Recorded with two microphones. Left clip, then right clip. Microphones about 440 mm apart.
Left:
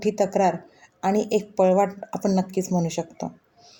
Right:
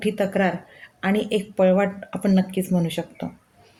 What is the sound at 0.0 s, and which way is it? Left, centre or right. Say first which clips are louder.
Speech: left 1 dB; right.